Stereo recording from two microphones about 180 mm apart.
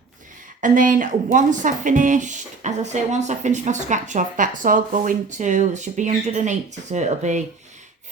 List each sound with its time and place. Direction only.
0.6 s speech: 45° right (ahead or behind)